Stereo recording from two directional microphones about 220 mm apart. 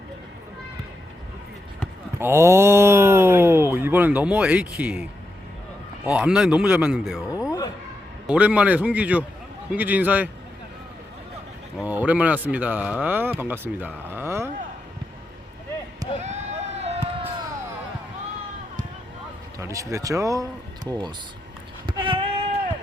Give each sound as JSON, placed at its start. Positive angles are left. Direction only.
{"t": 2.1, "sound": "speech", "side_deg": -10}
{"t": 6.1, "sound": "speech", "side_deg": -5}
{"t": 8.3, "sound": "speech", "side_deg": -5}
{"t": 11.8, "sound": "speech", "side_deg": -5}
{"t": 16.2, "sound": "a sound", "side_deg": -30}
{"t": 19.5, "sound": "speech", "side_deg": -15}
{"t": 21.8, "sound": "female singing", "side_deg": -20}